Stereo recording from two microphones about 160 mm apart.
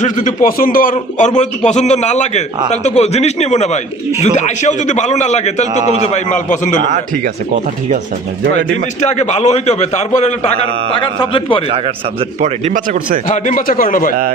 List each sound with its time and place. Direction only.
0.0 s a man's voice: 55° left (ahead or behind)
8.5 s a man's voice: 45° left (ahead or behind)
10.9 s speech: 30° left (ahead or behind)
12.4 s speech: 45° right (ahead or behind)
13.2 s speech: 50° left (ahead or behind)